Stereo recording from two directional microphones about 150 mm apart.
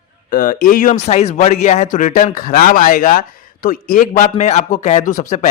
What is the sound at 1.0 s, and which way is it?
A man's voice, 50° left (ahead or behind).